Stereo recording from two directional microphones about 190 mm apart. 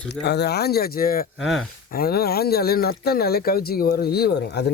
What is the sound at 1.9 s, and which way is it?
Speech, 55° left (ahead or behind).